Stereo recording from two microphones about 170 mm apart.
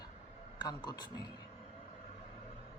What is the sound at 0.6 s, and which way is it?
Speech, 25° left (ahead or behind).